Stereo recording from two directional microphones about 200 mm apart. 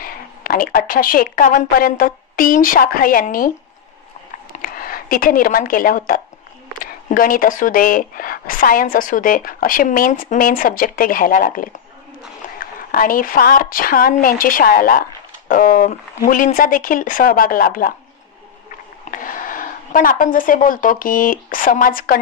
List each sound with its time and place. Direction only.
0.0 s a woman's voice: 45° left (ahead or behind)
19.0 s speech: 40° left (ahead or behind)